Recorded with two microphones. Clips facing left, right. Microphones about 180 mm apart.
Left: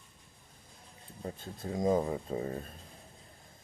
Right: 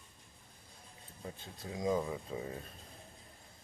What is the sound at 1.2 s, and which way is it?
Speech, 50° left (ahead or behind).